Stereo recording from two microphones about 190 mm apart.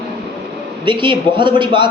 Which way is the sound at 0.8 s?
25° right (ahead or behind).